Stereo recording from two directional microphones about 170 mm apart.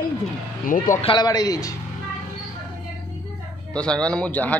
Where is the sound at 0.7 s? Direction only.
55° left (ahead or behind).